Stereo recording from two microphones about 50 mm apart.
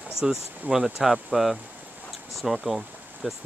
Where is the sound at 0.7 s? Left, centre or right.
Centre.